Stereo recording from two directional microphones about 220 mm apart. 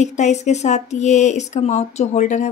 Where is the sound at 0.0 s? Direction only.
30° left (ahead or behind).